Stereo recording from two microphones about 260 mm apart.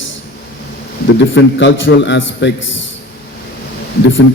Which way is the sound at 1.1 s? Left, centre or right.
Left.